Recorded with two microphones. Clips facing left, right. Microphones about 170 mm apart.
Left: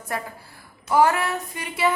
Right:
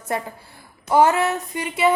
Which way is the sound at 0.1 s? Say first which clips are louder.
Right 4 dB; 25° right (ahead or behind).